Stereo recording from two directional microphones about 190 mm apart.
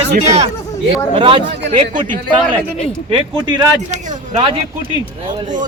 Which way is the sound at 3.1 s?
25° right (ahead or behind).